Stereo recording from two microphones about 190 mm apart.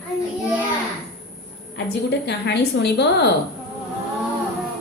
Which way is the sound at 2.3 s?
60° left (ahead or behind).